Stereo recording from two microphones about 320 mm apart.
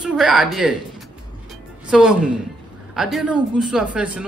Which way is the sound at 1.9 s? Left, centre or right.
Centre.